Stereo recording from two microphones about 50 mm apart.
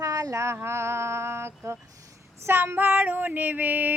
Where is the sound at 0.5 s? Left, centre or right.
Right.